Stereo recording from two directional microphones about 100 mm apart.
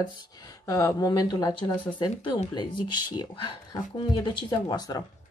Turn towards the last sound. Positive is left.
turn(degrees=40)  # may be behind; listen again after turning